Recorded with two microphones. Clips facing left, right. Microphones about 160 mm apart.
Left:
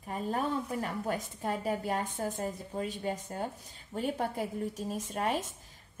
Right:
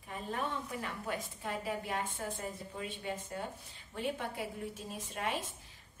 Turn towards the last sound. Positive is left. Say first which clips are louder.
# left 5 dB
turn(degrees=45)  # may be behind; listen again after turning